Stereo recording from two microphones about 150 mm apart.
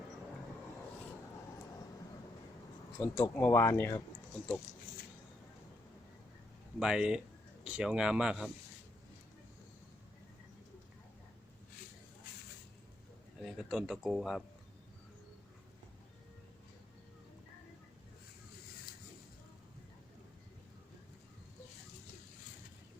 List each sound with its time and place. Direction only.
3.0 s speech: 15° left (ahead or behind)
6.7 s speech: 5° right (ahead or behind)
13.4 s speech: 5° right (ahead or behind)